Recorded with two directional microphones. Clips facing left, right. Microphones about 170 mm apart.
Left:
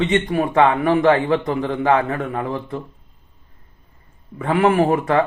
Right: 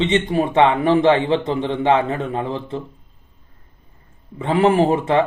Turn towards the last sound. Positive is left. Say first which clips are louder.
# right 1 dB
turn(degrees=-25)  # may be behind; listen again after turning